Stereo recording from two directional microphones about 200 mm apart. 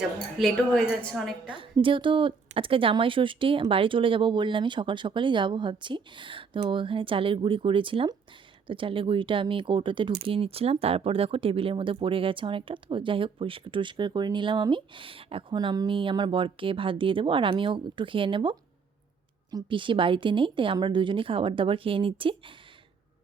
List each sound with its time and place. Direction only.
0.3 s a woman's voice: centre (ahead or behind)
1.5 s speech: 25° right (ahead or behind)